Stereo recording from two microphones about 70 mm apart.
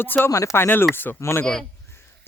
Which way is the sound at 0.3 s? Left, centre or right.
Left.